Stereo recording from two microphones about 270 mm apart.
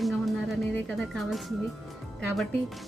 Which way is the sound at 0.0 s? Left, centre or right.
Centre.